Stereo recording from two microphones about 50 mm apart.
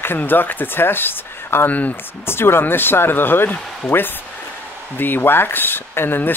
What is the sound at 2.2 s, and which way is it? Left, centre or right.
Speech, left.